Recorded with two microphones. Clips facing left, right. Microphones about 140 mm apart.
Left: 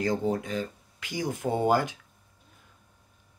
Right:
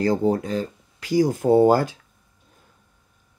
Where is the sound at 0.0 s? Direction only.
35° right (ahead or behind).